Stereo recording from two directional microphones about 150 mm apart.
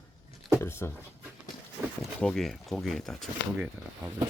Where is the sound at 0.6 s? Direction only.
15° left (ahead or behind).